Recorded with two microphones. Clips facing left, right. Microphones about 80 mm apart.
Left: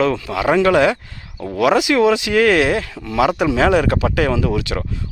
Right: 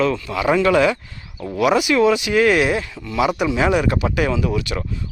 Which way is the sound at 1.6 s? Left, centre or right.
Left.